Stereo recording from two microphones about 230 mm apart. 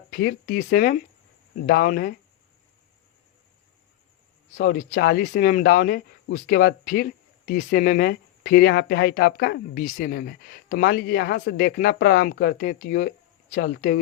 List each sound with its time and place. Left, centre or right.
0.2 s speech: left
4.5 s speech: left